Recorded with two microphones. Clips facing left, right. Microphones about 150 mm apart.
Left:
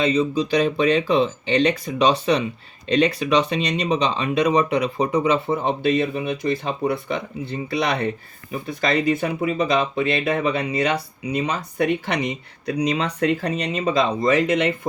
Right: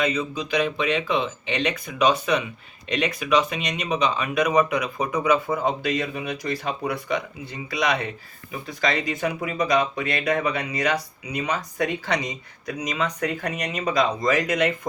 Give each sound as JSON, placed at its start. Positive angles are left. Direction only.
{"t": 0.0, "sound": "speech", "side_deg": 30}
{"t": 9.2, "sound": "speech", "side_deg": 25}
{"t": 11.9, "sound": "speech", "side_deg": 60}
{"t": 12.6, "sound": "speech", "side_deg": 30}